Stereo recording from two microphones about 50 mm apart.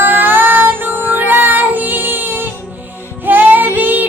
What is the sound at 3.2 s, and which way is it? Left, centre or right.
Child singing, right.